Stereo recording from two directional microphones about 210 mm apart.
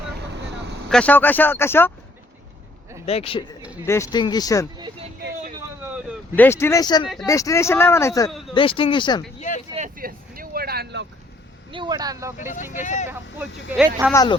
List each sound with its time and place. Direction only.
0.6 s vehicle: 50° right (ahead or behind)
0.9 s speech: 5° left (ahead or behind)
3.1 s speech: 30° left (ahead or behind)
3.8 s speech: 15° left (ahead or behind)
6.3 s speech: 10° left (ahead or behind)
8.3 s a sound: centre (ahead or behind)
8.5 s speech: 25° left (ahead or behind)
9.7 s vehicle: 40° right (ahead or behind)
11.7 s speech: 20° right (ahead or behind)
12.8 s speech: 35° left (ahead or behind)
13.7 s speech: 5° right (ahead or behind)
14.1 s speech: 15° left (ahead or behind)